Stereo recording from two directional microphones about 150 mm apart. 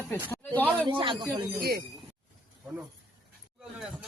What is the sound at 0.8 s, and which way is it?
Speech, 35° right (ahead or behind).